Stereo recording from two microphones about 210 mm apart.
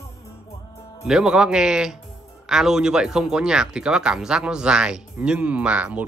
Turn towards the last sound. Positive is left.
turn(degrees=-5)  # may be behind; listen again after turning